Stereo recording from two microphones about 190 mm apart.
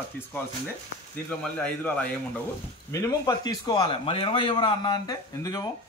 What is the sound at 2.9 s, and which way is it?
A man's voice, 20° left (ahead or behind).